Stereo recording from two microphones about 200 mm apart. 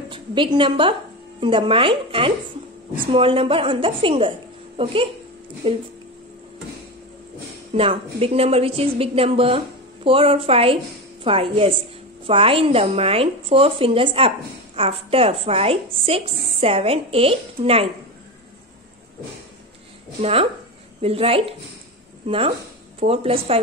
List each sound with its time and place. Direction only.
0.1 s a woman's voice: 25° right (ahead or behind)
5.6 s a woman's voice: 25° right (ahead or behind)
7.7 s a woman's voice: 30° right (ahead or behind)
20.2 s a woman's voice: 30° right (ahead or behind)
22.9 s a woman's voice: 30° right (ahead or behind)